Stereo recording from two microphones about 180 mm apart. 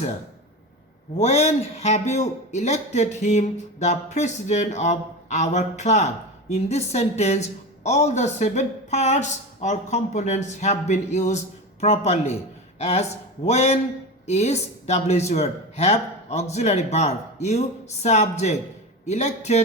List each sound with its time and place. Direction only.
1.1 s a man's voice: 35° left (ahead or behind)